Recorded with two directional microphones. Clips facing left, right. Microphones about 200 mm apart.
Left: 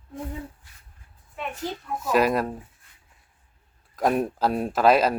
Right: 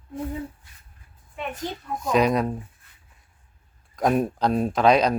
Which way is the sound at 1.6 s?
5° left (ahead or behind).